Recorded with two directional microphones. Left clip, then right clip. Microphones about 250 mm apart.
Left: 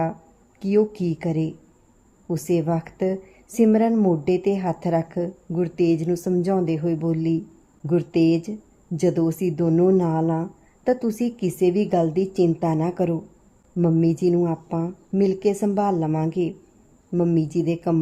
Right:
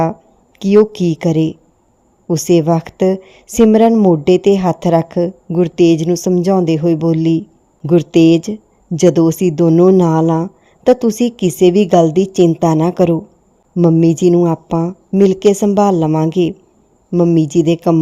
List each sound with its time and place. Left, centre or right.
1.2 s a woman's voice: right